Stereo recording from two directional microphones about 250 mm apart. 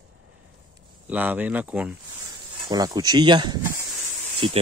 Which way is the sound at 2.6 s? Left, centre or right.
Centre.